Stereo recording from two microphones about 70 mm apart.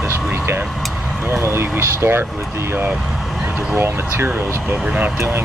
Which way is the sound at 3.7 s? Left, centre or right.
Right.